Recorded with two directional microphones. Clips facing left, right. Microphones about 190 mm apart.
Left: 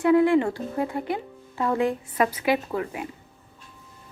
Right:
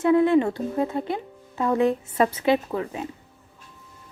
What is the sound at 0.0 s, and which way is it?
A woman's voice, 20° right (ahead or behind).